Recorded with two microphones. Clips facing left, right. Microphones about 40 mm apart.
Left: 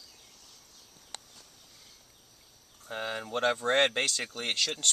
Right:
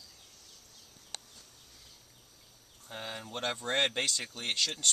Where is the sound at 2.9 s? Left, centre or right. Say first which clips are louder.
Left 7 dB; centre.